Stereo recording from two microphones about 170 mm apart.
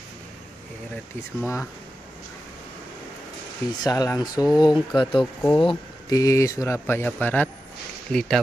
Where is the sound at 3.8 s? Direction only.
20° left (ahead or behind).